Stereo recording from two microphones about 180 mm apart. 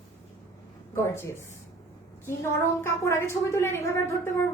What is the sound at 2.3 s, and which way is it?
A woman's voice, 15° left (ahead or behind).